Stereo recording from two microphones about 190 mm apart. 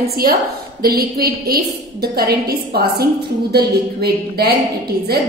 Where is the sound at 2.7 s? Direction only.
55° right (ahead or behind).